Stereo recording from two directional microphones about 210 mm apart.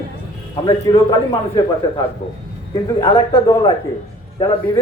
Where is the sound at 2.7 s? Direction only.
20° left (ahead or behind).